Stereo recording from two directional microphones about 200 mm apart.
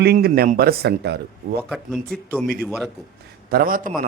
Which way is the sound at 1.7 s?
5° right (ahead or behind).